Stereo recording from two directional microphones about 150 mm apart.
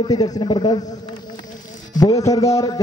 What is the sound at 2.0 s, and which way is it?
Speech, 25° left (ahead or behind).